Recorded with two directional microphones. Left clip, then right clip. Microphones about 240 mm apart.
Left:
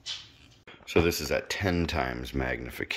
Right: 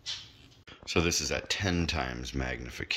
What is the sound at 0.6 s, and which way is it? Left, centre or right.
Speech, centre.